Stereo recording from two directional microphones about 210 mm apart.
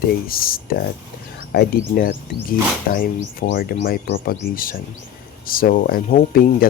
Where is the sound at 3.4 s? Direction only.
45° left (ahead or behind).